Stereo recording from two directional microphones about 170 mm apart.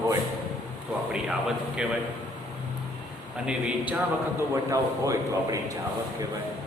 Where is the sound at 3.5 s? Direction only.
5° right (ahead or behind).